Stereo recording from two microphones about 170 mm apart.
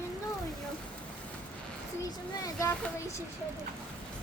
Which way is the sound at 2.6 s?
15° left (ahead or behind).